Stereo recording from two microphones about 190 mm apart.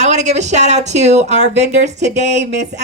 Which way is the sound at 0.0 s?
35° right (ahead or behind).